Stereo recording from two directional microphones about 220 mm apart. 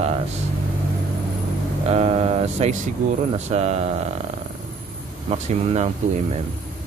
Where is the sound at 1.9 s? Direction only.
30° right (ahead or behind).